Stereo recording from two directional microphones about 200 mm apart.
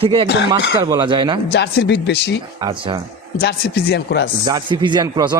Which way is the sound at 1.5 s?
60° left (ahead or behind).